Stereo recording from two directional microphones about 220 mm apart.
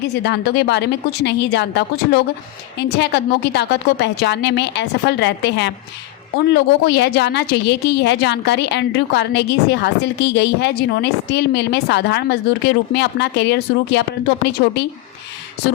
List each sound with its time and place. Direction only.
0.1 s a woman's voice: 50° left (ahead or behind)